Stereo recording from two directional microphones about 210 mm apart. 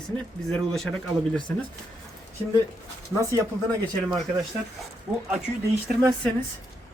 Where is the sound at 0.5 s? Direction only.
Centre (ahead or behind).